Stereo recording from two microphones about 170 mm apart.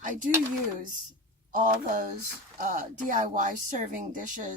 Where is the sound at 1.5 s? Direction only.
50° right (ahead or behind).